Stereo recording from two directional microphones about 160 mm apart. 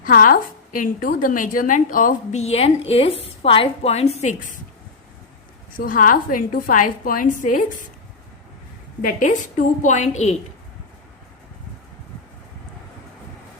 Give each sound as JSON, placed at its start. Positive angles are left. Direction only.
{"t": 0.0, "sound": "a woman's voice", "side_deg": 60}
{"t": 5.7, "sound": "a woman's voice", "side_deg": 60}
{"t": 9.0, "sound": "a woman's voice", "side_deg": 55}